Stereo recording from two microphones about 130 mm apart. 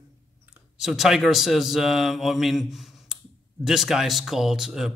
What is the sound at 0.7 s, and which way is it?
Speech, centre (ahead or behind).